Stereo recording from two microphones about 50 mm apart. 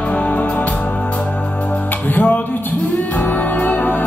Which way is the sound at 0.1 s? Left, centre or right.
Left.